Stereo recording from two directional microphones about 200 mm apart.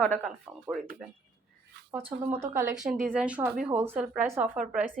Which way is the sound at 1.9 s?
10° right (ahead or behind).